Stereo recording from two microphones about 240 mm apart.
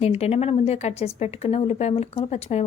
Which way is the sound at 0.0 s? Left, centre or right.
Left.